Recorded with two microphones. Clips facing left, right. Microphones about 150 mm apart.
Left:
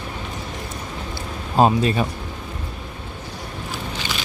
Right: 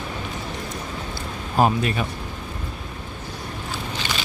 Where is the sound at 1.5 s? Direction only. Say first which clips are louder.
Left 3 dB; 25° left (ahead or behind).